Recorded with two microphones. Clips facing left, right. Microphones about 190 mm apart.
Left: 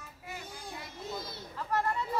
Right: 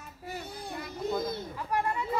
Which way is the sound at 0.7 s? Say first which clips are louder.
Right 9 dB; 55° right (ahead or behind).